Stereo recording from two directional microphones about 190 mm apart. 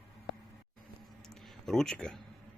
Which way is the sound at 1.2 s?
Centre (ahead or behind).